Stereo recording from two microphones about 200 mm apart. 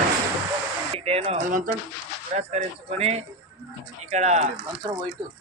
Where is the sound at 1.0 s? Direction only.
30° right (ahead or behind).